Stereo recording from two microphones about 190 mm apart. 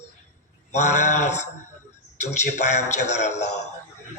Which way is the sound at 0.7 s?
40° left (ahead or behind).